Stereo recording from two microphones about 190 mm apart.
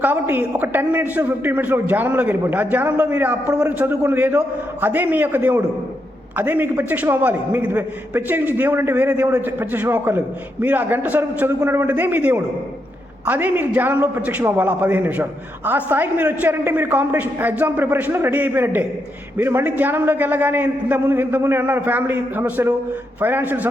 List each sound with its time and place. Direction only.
0.0 s a man's voice: 10° right (ahead or behind)